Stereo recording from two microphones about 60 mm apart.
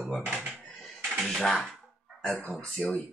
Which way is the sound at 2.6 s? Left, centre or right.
Centre.